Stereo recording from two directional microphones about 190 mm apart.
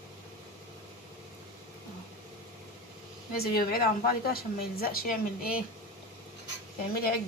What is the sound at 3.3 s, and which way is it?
A woman's voice, 55° left (ahead or behind).